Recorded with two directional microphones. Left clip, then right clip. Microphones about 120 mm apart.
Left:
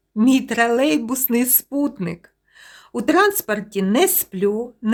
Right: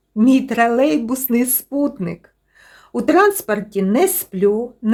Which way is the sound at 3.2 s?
10° left (ahead or behind).